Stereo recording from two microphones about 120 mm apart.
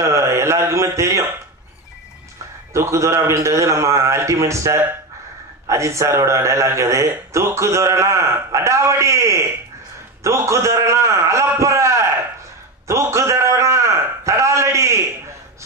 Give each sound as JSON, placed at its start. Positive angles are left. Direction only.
{"t": 0.0, "sound": "a man's voice", "side_deg": -25}
{"t": 2.7, "sound": "a man's voice", "side_deg": -25}
{"t": 12.8, "sound": "a sound", "side_deg": -25}